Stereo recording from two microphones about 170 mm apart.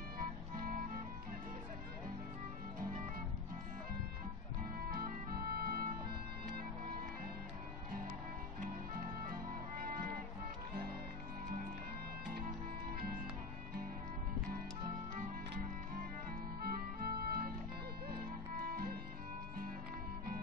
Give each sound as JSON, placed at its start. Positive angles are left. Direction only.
{"t": 0.2, "sound": "music", "side_deg": -55}
{"t": 4.9, "sound": "organ", "side_deg": -60}
{"t": 15.5, "sound": "music", "side_deg": -55}
{"t": 18.7, "sound": "music", "side_deg": -60}